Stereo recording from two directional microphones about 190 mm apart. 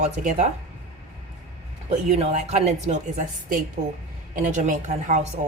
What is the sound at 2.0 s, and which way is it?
A woman's voice, 35° right (ahead or behind).